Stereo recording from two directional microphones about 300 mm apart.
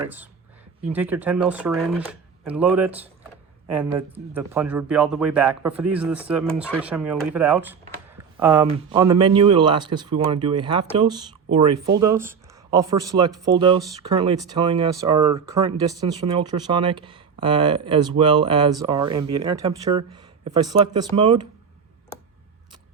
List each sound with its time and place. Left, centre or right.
0.9 s speech: centre